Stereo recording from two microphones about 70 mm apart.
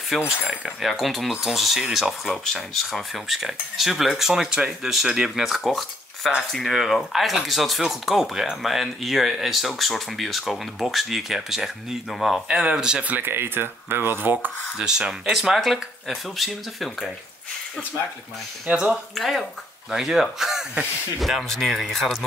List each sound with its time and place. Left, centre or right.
0.4 s speech: centre
2.3 s speech: centre
2.8 s speech: centre
13.0 s speech: right
14.8 s speech: centre
18.9 s speech: centre